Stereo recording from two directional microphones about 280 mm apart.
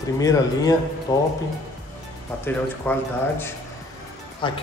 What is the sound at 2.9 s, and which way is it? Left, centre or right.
Speech, centre.